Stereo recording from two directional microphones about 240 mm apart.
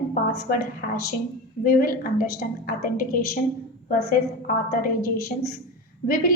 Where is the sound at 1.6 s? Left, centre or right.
Left.